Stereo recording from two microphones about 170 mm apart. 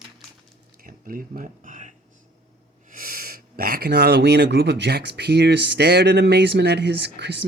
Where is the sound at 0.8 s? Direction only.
55° right (ahead or behind).